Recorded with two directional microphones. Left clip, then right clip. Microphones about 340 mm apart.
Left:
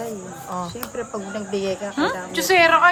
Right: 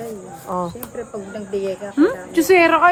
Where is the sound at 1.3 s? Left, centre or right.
Left.